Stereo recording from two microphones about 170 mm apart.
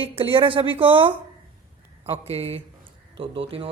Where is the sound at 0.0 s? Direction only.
30° right (ahead or behind).